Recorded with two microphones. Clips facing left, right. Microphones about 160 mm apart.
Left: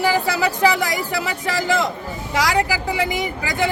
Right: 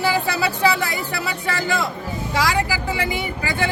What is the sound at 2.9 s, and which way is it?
Speech, 15° left (ahead or behind).